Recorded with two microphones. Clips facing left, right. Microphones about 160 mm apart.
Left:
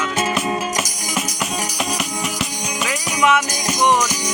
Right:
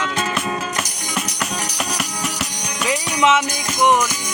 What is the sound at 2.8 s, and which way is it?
Music, 25° right (ahead or behind).